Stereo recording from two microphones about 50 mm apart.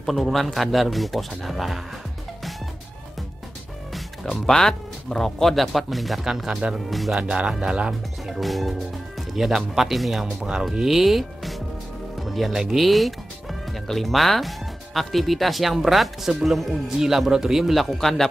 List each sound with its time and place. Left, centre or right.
0.0 s speech: centre
3.9 s speech: centre
7.2 s speech: centre
8.3 s speech: centre
12.2 s music: centre
12.7 s speech: centre